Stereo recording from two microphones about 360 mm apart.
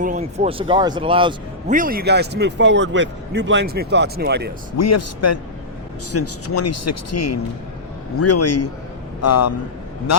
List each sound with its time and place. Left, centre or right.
0.0 s speech: centre
4.8 s a man's voice: left